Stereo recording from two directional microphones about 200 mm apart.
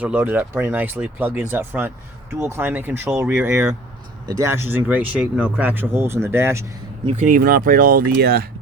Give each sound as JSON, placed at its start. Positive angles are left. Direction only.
{"t": 0.0, "sound": "speech", "side_deg": -10}
{"t": 7.3, "sound": "speech", "side_deg": -45}